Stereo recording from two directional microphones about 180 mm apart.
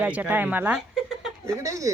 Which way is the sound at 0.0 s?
10° right (ahead or behind).